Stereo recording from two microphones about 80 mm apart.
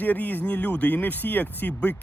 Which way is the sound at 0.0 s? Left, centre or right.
Left.